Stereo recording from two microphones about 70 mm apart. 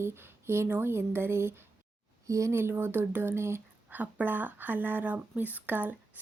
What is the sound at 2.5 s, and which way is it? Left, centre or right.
A woman's voice, right.